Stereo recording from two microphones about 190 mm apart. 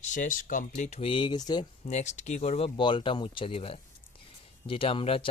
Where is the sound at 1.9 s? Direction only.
40° left (ahead or behind).